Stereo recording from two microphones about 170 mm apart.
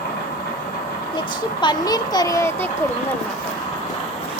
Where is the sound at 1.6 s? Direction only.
25° left (ahead or behind).